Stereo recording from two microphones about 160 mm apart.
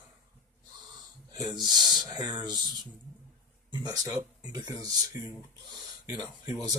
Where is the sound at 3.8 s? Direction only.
25° right (ahead or behind).